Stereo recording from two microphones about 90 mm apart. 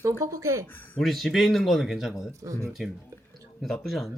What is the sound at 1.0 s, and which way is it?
Speech, centre (ahead or behind).